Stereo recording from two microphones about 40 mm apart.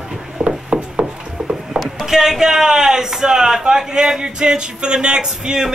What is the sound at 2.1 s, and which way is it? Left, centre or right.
Speech, centre.